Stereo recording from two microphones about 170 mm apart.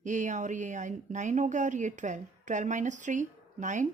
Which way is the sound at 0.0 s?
45° right (ahead or behind).